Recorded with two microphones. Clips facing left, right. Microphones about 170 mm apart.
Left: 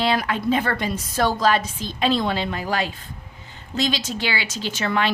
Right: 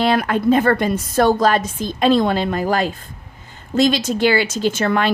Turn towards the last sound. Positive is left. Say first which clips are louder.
# right 6 dB
turn(degrees=-50)  # may be behind; listen again after turning